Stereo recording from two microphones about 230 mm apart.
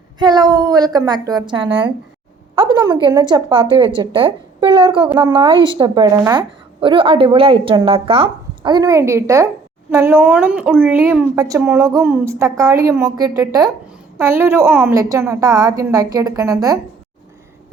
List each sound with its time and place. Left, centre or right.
0.2 s a woman's voice: centre
5.0 s a woman's voice: centre